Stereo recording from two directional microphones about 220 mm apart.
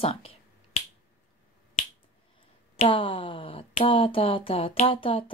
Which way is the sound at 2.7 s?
25° left (ahead or behind).